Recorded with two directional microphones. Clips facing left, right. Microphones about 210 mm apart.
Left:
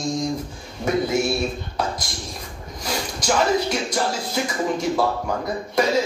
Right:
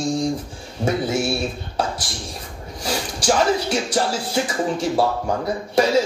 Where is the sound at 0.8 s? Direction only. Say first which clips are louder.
Even; 30° right (ahead or behind).